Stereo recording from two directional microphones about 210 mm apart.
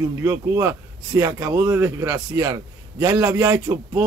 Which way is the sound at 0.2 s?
15° right (ahead or behind).